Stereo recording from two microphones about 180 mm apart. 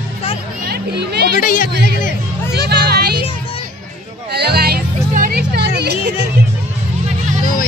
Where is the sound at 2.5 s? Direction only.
65° right (ahead or behind).